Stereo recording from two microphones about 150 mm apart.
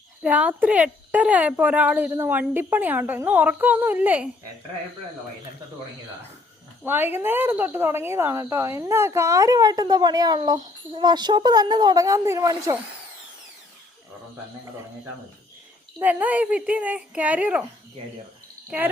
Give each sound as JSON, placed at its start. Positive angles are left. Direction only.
{"t": 0.2, "sound": "speech", "side_deg": -10}
{"t": 6.8, "sound": "a woman's voice", "side_deg": -15}
{"t": 16.0, "sound": "speech", "side_deg": -10}
{"t": 18.0, "sound": "speech", "side_deg": -40}